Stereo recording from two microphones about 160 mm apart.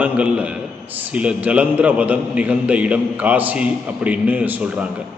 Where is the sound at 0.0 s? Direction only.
10° right (ahead or behind).